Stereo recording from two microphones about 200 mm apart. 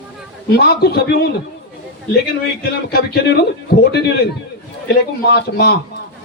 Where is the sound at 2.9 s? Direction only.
55° left (ahead or behind).